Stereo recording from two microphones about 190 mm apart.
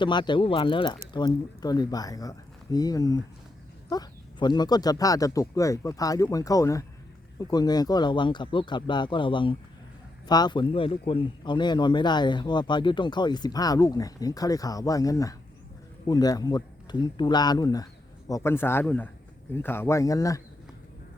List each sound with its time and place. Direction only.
0.0 s a man's voice: 25° left (ahead or behind)